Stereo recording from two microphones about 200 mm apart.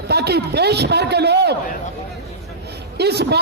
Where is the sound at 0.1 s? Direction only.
55° right (ahead or behind).